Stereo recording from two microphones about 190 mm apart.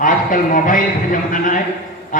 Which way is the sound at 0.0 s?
45° left (ahead or behind).